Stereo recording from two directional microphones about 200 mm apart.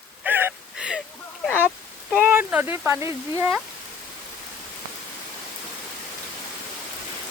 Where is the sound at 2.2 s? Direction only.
10° right (ahead or behind).